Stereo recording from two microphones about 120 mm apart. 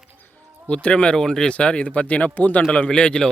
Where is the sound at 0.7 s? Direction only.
10° left (ahead or behind).